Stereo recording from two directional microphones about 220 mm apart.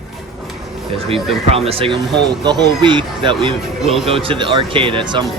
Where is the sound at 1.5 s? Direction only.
25° right (ahead or behind).